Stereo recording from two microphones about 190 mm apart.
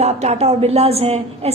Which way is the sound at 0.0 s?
35° right (ahead or behind).